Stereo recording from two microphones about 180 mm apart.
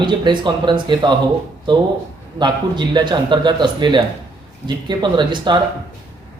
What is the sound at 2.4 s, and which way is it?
Speech, 25° right (ahead or behind).